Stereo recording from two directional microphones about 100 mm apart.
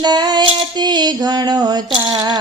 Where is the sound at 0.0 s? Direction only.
45° right (ahead or behind).